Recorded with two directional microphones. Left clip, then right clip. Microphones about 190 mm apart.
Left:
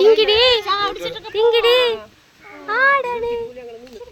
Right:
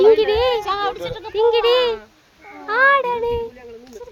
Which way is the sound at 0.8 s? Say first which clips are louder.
Even; 35° right (ahead or behind).